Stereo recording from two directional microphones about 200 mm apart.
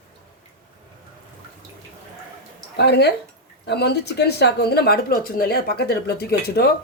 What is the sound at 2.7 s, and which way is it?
Speech, 55° left (ahead or behind).